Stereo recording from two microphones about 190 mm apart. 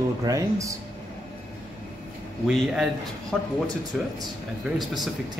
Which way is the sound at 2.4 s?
Centre (ahead or behind).